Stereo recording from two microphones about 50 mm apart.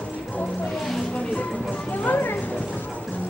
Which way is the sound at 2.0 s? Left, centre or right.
Left.